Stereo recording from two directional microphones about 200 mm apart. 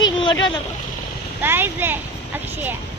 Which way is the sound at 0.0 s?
25° left (ahead or behind).